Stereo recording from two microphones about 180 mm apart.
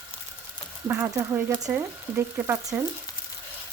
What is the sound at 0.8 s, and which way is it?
Speech, 15° right (ahead or behind).